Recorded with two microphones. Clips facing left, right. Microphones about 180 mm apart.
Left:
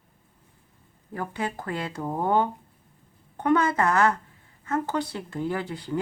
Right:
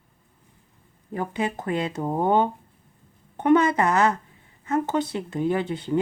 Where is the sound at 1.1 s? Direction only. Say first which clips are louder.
Right 4 dB; 20° right (ahead or behind).